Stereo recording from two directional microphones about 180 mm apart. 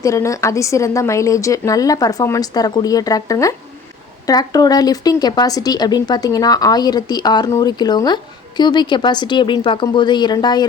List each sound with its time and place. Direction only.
0.0 s speech: 15° left (ahead or behind)